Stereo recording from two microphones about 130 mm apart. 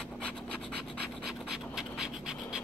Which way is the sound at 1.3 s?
5° right (ahead or behind).